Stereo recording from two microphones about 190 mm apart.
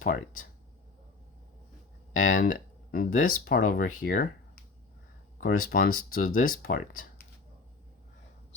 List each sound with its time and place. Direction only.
2.1 s speech: 45° left (ahead or behind)
5.4 s speech: 45° left (ahead or behind)